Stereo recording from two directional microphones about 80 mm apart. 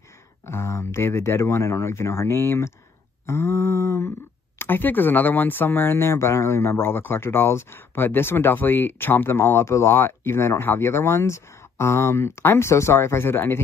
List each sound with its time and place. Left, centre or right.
0.5 s speech: left
4.6 s speech: left